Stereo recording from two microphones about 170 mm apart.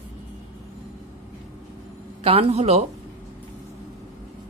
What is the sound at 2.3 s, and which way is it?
Speech, 35° right (ahead or behind).